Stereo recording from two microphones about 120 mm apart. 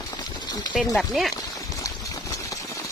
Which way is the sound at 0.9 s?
Centre (ahead or behind).